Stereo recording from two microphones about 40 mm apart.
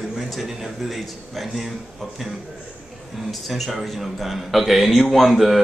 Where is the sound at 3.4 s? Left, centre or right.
Centre.